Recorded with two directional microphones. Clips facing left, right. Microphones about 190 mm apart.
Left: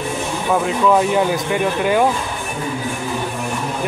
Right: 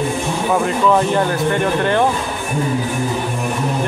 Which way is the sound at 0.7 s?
5° left (ahead or behind).